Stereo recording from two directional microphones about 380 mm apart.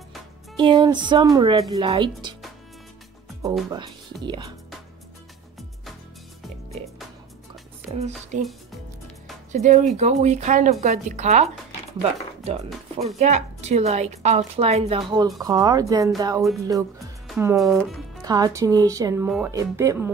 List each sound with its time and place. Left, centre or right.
0.6 s a woman's voice: centre
3.4 s a woman's voice: centre
8.3 s a woman's voice: centre
13.0 s a woman's voice: centre